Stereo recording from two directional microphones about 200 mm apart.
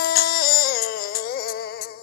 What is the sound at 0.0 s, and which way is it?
Music, 50° left (ahead or behind).